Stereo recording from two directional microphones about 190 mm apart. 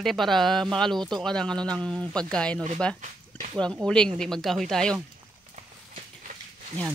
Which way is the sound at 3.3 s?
5° left (ahead or behind).